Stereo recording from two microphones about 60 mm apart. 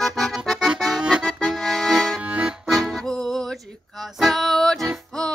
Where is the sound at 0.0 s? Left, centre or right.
Centre.